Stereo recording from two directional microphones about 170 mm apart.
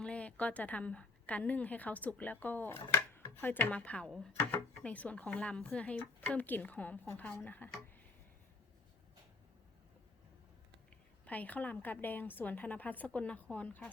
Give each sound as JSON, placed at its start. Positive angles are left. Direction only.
{"t": 0.0, "sound": "a woman's voice", "side_deg": 5}
{"t": 11.3, "sound": "a woman's voice", "side_deg": 10}